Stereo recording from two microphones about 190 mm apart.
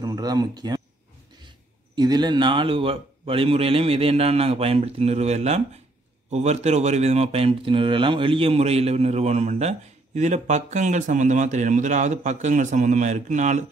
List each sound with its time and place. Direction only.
0.0 s speech: 20° right (ahead or behind)
2.0 s speech: 20° right (ahead or behind); by 13.7 s 40° right (ahead or behind)